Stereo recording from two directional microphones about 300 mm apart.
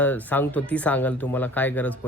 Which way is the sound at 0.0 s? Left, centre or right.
Centre.